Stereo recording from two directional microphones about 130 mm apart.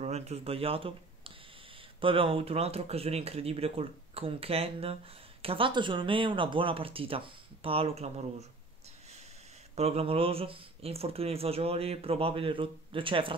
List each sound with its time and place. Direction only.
0.0 s speech: 55° right (ahead or behind)
9.8 s speech: 50° right (ahead or behind)